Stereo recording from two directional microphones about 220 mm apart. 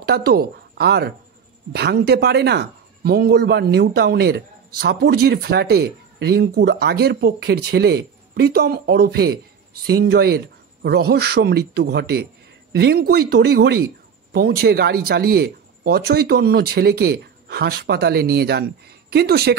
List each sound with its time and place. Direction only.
0.0 s speech: 45° right (ahead or behind)